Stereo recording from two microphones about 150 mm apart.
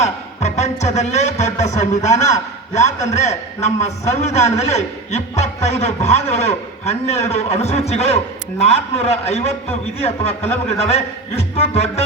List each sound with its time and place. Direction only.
0.0 s speech: 50° left (ahead or behind)